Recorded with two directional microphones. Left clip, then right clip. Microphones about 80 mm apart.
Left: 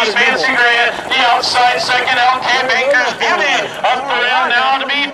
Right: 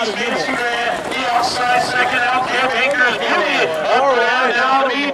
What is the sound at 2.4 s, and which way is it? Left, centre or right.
Speech, centre.